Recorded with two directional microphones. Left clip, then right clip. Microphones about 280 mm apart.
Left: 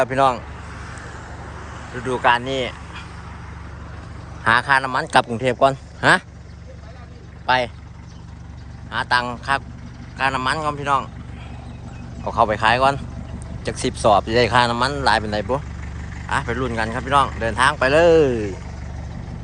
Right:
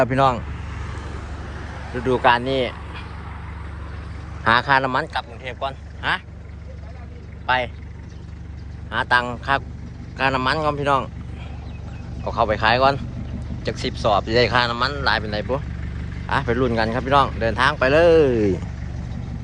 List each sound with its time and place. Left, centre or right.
0.0 s speech: centre
2.0 s speech: centre
4.4 s speech: centre
5.1 s speech: left
7.4 s speech: centre
8.9 s speech: centre
12.2 s speech: centre
16.3 s speech: centre